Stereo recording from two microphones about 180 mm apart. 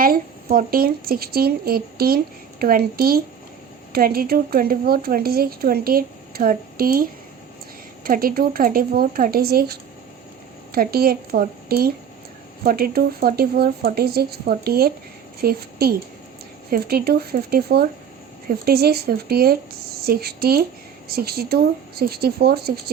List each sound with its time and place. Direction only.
0.0 s a woman's voice: 55° right (ahead or behind)